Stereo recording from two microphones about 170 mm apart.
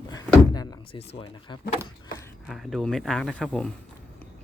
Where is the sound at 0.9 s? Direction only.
30° left (ahead or behind).